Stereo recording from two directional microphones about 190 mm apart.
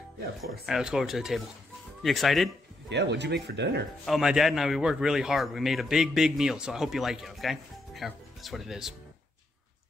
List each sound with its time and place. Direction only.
0.4 s a man's voice: centre (ahead or behind)
2.9 s speech: 65° right (ahead or behind)
4.0 s a man's voice: centre (ahead or behind)